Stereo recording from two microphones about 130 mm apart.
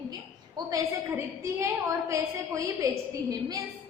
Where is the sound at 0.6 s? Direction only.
35° right (ahead or behind).